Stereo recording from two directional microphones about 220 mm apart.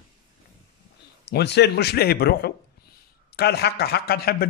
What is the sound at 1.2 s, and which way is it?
A man's voice, 50° left (ahead or behind).